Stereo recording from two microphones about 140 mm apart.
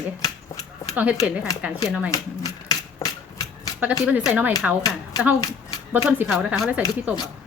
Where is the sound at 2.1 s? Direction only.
25° left (ahead or behind).